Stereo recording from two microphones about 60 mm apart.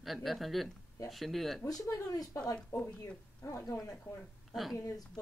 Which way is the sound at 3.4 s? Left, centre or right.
Left.